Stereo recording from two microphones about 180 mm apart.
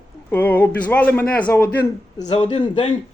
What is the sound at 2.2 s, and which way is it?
Speech, 30° left (ahead or behind).